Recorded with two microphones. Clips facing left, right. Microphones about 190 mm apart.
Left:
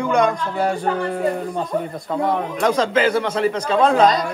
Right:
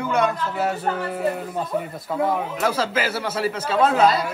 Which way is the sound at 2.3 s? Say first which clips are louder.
Left 4 dB; 5° right (ahead or behind).